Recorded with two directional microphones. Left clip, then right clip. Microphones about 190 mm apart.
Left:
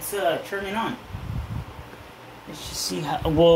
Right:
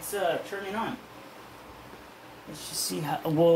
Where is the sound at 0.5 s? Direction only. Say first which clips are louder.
Left 6 dB; 40° left (ahead or behind).